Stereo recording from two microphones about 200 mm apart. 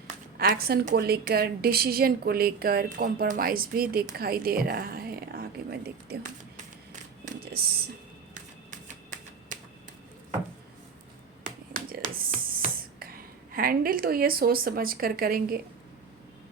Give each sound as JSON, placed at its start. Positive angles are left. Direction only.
{"t": 0.3, "sound": "a woman's voice", "side_deg": -50}
{"t": 8.7, "sound": "typewriter", "side_deg": -40}
{"t": 11.4, "sound": "finger snapping", "side_deg": -40}